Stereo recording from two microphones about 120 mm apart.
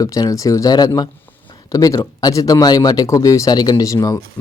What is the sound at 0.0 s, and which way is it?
Speech, 30° left (ahead or behind).